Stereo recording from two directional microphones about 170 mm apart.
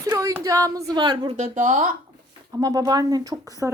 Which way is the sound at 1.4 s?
45° right (ahead or behind).